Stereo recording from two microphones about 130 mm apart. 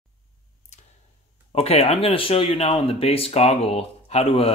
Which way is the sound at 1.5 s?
50° left (ahead or behind).